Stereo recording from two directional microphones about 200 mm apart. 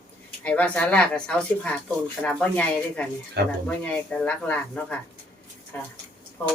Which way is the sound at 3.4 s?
55° right (ahead or behind).